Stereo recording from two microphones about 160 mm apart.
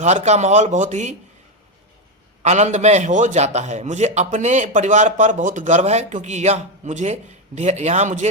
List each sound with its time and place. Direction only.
0.0 s a man's voice: 45° right (ahead or behind)
2.4 s a man's voice: 45° right (ahead or behind)